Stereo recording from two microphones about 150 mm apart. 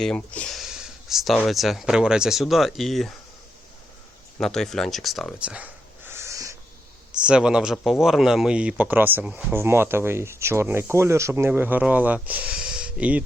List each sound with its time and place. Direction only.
0.0 s a sound: 5° left (ahead or behind)
1.5 s speech: centre (ahead or behind)
4.4 s speech: 5° left (ahead or behind)
6.1 s wheeze: 20° right (ahead or behind)
7.3 s speech: 5° right (ahead or behind)